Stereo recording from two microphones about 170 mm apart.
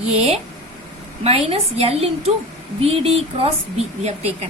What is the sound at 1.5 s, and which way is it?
A woman's voice, 35° right (ahead or behind).